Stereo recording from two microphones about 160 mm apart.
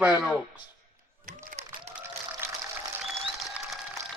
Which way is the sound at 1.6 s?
45° right (ahead or behind).